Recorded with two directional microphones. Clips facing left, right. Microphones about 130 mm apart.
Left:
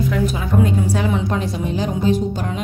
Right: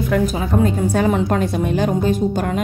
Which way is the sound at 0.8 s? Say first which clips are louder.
Right 4 dB; 50° right (ahead or behind).